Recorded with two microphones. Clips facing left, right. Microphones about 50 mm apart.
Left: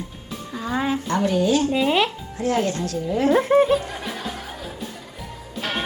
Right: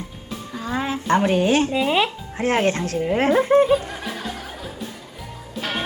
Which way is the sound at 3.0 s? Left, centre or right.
Right.